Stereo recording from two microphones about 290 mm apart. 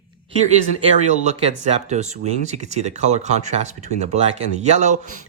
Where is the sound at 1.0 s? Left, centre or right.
Right.